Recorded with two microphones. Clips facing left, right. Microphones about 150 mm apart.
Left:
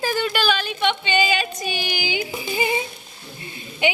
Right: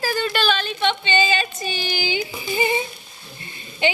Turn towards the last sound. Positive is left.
turn(degrees=10)  # may be behind; listen again after turning